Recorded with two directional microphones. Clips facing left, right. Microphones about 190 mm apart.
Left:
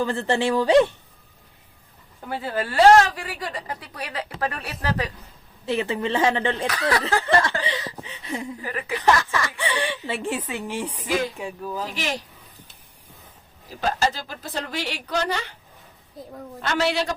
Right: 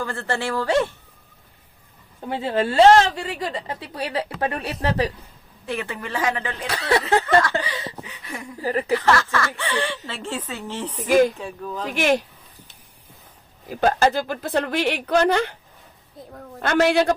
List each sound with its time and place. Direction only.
0.0 s speech: 20° left (ahead or behind)
2.2 s a woman's voice: 25° right (ahead or behind)
5.6 s speech: 25° left (ahead or behind)
6.7 s a woman's voice: 25° right (ahead or behind)
8.0 s a sound: 25° left (ahead or behind)
8.6 s a woman's voice: 35° right (ahead or behind)
8.9 s speech: 15° left (ahead or behind)
11.9 s speech: 55° right (ahead or behind)
13.7 s speech: 55° right (ahead or behind)
16.2 s a woman's voice: centre (ahead or behind)
16.6 s a woman's voice: 50° right (ahead or behind)